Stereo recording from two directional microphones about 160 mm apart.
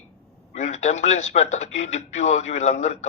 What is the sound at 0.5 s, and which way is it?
Speech, 45° left (ahead or behind).